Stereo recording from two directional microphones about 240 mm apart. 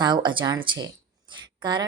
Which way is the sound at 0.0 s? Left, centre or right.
Centre.